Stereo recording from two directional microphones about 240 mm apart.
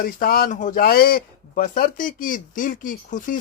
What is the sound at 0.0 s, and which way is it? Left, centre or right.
A man's voice, left.